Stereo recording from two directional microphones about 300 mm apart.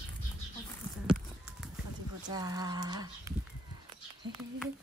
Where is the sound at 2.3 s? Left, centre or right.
Centre.